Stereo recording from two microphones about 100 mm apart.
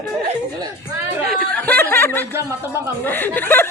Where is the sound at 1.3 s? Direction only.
15° left (ahead or behind).